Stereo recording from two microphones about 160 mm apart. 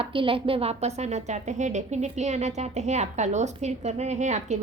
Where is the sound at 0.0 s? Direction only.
35° right (ahead or behind).